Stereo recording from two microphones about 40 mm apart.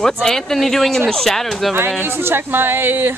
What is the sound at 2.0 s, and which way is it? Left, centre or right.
Speech, right.